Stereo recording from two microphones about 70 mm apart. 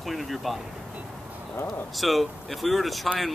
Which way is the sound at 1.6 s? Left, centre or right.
Centre.